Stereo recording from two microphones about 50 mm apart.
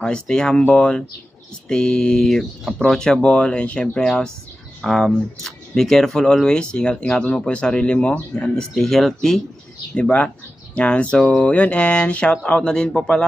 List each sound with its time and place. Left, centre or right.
0.0 s speech: centre
4.8 s speech: centre; by 8.6 s left
8.7 s speech: centre
9.9 s speech: left